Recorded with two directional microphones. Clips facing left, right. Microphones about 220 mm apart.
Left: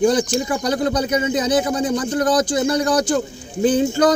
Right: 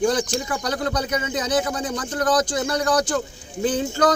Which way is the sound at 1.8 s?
10° left (ahead or behind).